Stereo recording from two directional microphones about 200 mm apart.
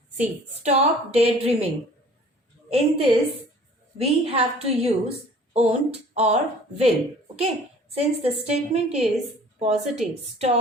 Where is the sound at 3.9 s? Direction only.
30° right (ahead or behind).